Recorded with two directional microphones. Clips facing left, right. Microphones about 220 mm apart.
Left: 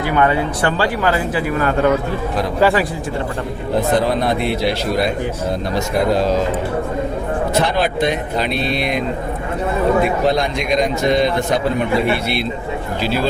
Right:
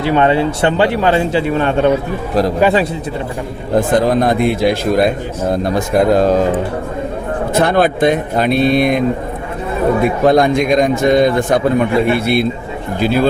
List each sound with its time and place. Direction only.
0.0 s a man's voice: 25° right (ahead or behind)
3.8 s a man's voice: 45° right (ahead or behind)
7.5 s a man's voice: 50° right (ahead or behind)
10.2 s a man's voice: 50° right (ahead or behind)